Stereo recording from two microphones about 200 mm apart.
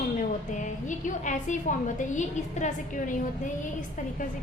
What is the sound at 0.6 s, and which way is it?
A woman's voice, 40° left (ahead or behind).